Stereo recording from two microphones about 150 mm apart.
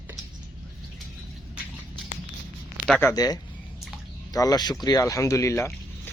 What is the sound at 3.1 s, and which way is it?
Speech, 25° left (ahead or behind).